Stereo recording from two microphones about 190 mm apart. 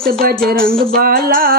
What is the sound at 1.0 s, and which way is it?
Speech, 50° right (ahead or behind).